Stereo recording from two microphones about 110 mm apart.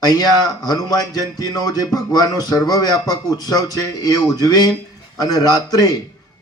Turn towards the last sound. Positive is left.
turn(degrees=35)  # may be behind; listen again after turning